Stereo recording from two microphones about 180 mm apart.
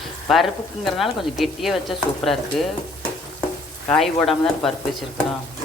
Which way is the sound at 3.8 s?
5° left (ahead or behind).